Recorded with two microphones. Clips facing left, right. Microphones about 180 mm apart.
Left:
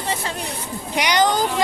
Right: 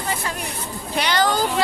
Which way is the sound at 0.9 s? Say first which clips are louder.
Left 2 dB; 15° left (ahead or behind).